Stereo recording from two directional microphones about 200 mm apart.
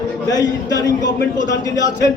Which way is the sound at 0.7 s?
20° left (ahead or behind).